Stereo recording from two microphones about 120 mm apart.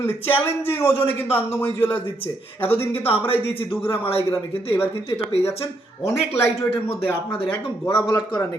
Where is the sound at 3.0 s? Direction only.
50° left (ahead or behind).